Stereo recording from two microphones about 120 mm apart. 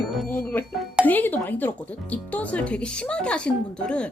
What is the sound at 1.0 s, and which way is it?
A woman's voice, 15° left (ahead or behind).